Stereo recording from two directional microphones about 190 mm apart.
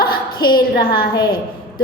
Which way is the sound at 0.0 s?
50° left (ahead or behind).